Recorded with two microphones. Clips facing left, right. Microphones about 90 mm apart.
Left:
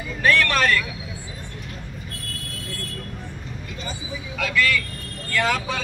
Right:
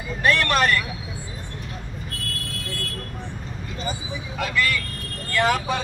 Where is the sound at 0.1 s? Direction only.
20° right (ahead or behind).